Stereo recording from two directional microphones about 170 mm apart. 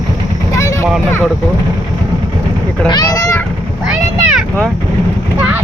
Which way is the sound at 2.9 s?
20° left (ahead or behind).